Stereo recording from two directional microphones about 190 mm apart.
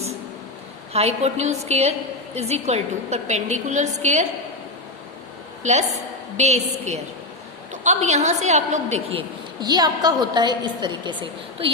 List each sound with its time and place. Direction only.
0.9 s a woman's voice: 35° right (ahead or behind)
6.3 s a woman's voice: 35° right (ahead or behind)